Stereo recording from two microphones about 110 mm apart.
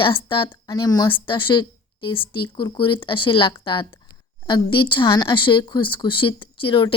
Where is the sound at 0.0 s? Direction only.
50° left (ahead or behind).